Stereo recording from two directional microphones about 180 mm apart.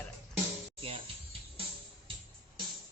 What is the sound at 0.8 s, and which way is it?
Music, 30° right (ahead or behind).